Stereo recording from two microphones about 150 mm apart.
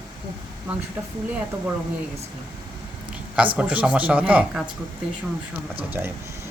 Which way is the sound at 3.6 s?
10° right (ahead or behind).